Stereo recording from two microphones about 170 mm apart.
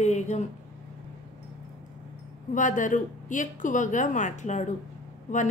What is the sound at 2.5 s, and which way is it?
A woman's voice, 50° left (ahead or behind).